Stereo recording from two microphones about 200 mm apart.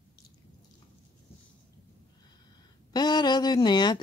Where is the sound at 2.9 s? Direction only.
20° left (ahead or behind).